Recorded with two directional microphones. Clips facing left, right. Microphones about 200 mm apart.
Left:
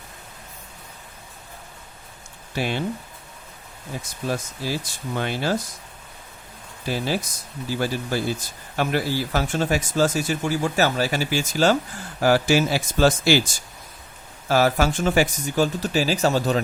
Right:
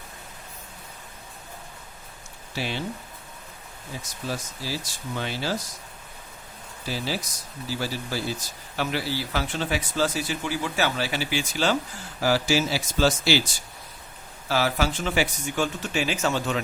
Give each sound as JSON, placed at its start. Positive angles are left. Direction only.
{"t": 2.6, "sound": "speech", "side_deg": 55}
{"t": 3.9, "sound": "speech", "side_deg": 55}
{"t": 6.8, "sound": "speech", "side_deg": 55}